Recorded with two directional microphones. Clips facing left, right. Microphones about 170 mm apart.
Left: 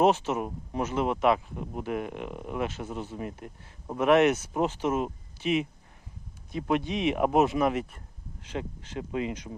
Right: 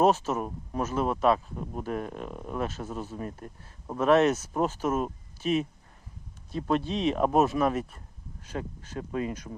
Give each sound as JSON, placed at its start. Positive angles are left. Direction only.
{"t": 0.3, "sound": "speech", "side_deg": 15}